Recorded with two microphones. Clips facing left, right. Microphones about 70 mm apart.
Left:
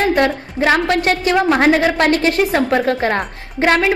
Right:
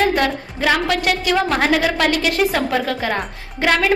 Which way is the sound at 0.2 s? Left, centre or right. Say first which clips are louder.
Left 4 dB; left.